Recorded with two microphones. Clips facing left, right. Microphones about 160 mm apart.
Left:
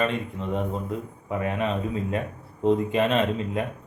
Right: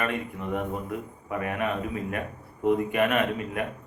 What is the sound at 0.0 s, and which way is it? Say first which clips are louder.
Speech: left 3 dB; 25° left (ahead or behind).